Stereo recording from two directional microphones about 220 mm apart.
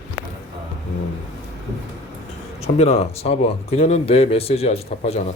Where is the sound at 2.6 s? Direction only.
30° left (ahead or behind).